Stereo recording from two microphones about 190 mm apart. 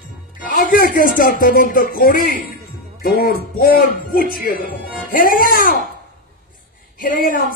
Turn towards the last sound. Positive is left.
turn(degrees=45)  # may be behind; listen again after turning